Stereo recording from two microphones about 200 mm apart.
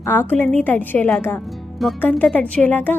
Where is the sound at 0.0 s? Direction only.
10° left (ahead or behind).